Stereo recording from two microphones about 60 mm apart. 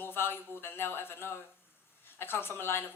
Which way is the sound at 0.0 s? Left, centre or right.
Left.